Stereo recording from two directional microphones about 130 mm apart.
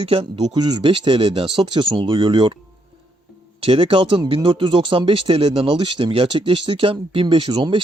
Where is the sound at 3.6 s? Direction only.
45° right (ahead or behind).